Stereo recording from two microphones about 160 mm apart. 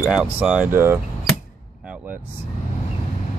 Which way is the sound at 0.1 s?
5° right (ahead or behind).